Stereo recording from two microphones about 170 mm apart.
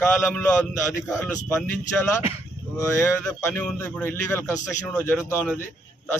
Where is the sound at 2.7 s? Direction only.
15° left (ahead or behind).